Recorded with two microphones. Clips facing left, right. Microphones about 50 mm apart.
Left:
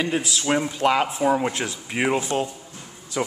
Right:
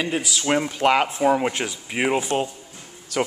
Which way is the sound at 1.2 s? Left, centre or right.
Centre.